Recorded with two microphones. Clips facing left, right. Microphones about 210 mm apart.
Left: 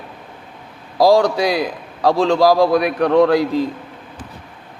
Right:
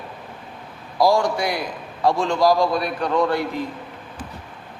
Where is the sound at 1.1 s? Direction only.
90° left.